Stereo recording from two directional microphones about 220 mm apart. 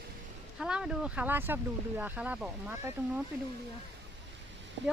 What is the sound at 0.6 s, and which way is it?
Speech, 5° right (ahead or behind).